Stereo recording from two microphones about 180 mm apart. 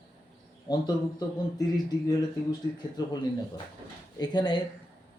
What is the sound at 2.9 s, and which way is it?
Speech, 20° left (ahead or behind).